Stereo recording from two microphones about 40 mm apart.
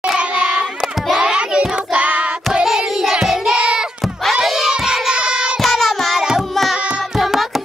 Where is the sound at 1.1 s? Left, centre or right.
Centre.